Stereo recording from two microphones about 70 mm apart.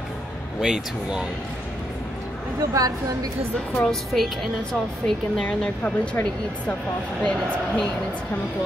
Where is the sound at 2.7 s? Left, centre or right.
Right.